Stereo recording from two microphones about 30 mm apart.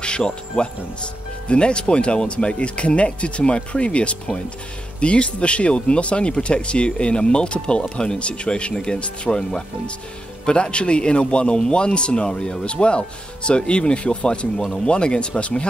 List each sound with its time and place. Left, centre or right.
0.0 s speech: left
7.9 s speech: left
8.2 s speech: left
8.7 s speech: left